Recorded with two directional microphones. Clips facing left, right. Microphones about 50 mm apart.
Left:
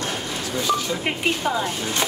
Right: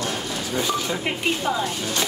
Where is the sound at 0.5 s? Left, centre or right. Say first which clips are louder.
Left 1 dB; centre.